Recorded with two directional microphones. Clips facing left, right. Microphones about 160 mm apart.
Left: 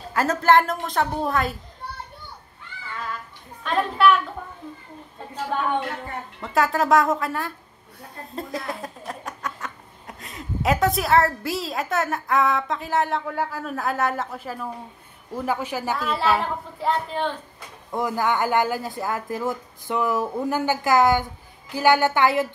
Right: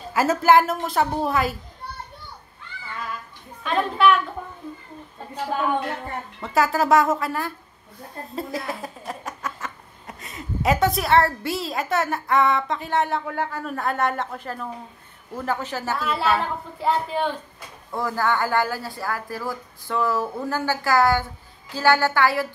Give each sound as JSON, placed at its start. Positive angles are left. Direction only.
{"t": 0.1, "sound": "speech", "side_deg": -5}
{"t": 3.6, "sound": "speech", "side_deg": 0}
{"t": 6.4, "sound": "speech", "side_deg": 0}
{"t": 16.1, "sound": "speech", "side_deg": 0}
{"t": 17.9, "sound": "a woman's voice", "side_deg": 15}